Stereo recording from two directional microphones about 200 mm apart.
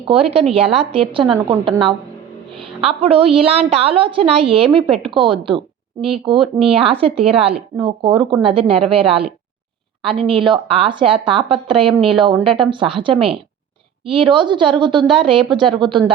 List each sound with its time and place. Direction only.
0.1 s a woman's voice: 30° right (ahead or behind)
2.6 s a woman's voice: 25° right (ahead or behind)